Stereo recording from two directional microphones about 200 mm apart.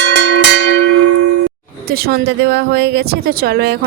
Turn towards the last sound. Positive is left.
turn(degrees=-50)  # may be behind; listen again after turning